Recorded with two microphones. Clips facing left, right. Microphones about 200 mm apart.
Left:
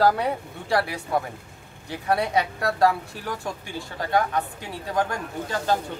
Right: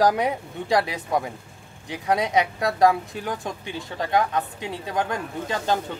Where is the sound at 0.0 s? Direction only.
15° right (ahead or behind).